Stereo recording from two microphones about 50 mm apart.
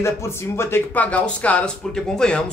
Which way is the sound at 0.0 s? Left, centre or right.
Left.